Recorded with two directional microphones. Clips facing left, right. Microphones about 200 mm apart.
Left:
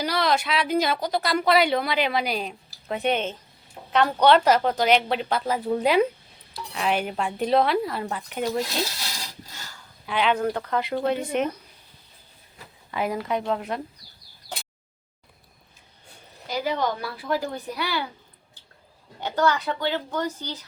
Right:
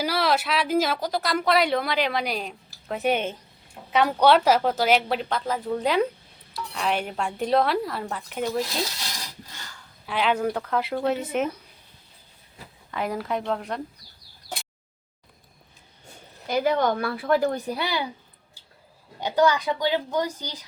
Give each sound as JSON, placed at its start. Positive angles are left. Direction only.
{"t": 0.0, "sound": "a woman's voice", "side_deg": -5}
{"t": 10.1, "sound": "speech", "side_deg": -5}
{"t": 12.9, "sound": "speech", "side_deg": 5}
{"t": 16.5, "sound": "a woman's voice", "side_deg": -55}
{"t": 17.7, "sound": "speech", "side_deg": -25}
{"t": 19.2, "sound": "a woman's voice", "side_deg": -10}